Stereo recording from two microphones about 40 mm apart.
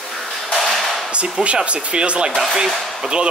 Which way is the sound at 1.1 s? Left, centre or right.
Right.